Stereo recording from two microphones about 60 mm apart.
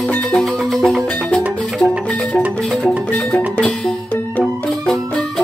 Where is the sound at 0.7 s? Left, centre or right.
Centre.